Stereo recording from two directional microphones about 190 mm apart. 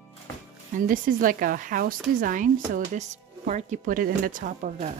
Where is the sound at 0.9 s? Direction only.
45° right (ahead or behind).